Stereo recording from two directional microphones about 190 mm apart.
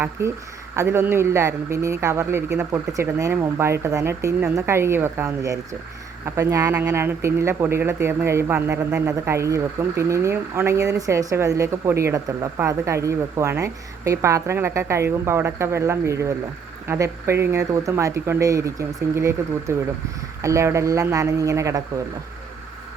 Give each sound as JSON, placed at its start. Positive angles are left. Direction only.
{"t": 0.2, "sound": "speech", "side_deg": -15}